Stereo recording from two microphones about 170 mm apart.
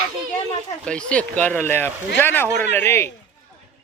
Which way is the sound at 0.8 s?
5° left (ahead or behind).